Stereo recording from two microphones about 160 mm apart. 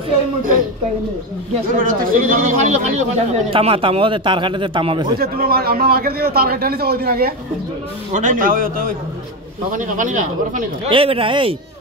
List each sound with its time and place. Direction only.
1.8 s speech: 60° right (ahead or behind)
3.5 s speech: 35° right (ahead or behind)
5.2 s a man's voice: 70° right (ahead or behind)
8.1 s a man's voice: 55° right (ahead or behind)
10.9 s speech: 35° right (ahead or behind)